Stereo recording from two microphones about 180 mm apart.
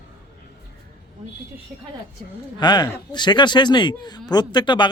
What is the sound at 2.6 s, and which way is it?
Speech, 25° left (ahead or behind).